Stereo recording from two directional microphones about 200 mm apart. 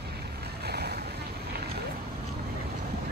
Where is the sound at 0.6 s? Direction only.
50° right (ahead or behind).